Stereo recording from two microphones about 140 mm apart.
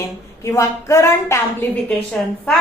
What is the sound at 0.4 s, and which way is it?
A woman's voice, 20° left (ahead or behind).